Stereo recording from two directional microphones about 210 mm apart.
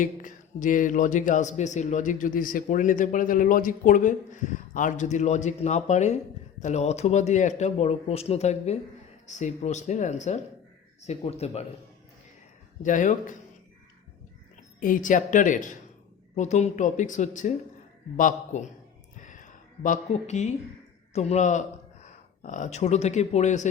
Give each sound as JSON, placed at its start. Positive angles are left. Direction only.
{"t": 0.0, "sound": "speech", "side_deg": 40}
{"t": 12.8, "sound": "speech", "side_deg": 40}
{"t": 14.8, "sound": "speech", "side_deg": 40}
{"t": 19.2, "sound": "a sound", "side_deg": 35}
{"t": 21.1, "sound": "speech", "side_deg": 30}